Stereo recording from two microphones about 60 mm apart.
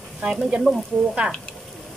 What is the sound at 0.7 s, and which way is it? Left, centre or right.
Speech, centre.